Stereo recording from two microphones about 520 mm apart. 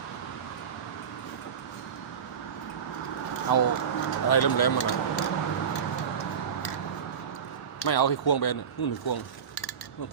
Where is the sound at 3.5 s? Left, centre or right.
Left.